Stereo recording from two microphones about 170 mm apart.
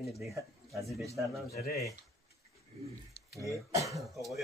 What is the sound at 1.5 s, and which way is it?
Speech, 65° left (ahead or behind).